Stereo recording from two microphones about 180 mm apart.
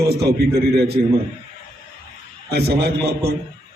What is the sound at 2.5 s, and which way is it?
Speech, 65° right (ahead or behind).